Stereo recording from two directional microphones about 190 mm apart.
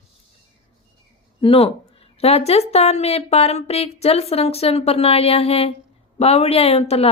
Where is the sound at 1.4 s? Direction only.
30° left (ahead or behind).